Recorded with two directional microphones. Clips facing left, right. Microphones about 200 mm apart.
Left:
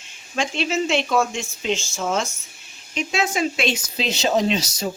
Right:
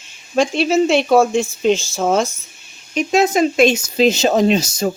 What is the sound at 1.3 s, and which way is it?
Speech, 55° right (ahead or behind).